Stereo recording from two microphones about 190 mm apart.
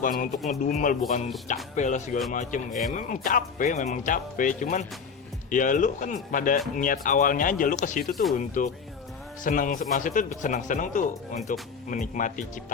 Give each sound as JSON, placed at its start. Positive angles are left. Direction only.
{"t": 0.0, "sound": "speech", "side_deg": 45}
{"t": 8.1, "sound": "speech", "side_deg": 0}
{"t": 8.4, "sound": "speech", "side_deg": 40}